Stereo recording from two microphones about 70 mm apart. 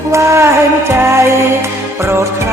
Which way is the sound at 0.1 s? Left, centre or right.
Right.